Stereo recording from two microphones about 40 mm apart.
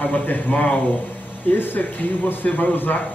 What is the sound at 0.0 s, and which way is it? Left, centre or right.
Speech, left.